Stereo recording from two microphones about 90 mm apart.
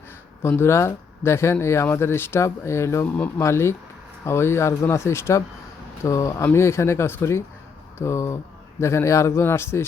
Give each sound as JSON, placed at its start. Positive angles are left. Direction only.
{"t": 0.4, "sound": "speech", "side_deg": 25}